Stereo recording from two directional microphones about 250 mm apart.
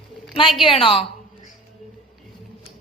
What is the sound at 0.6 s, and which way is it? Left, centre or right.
Speech, left.